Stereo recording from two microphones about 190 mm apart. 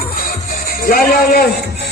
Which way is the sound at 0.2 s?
50° left (ahead or behind).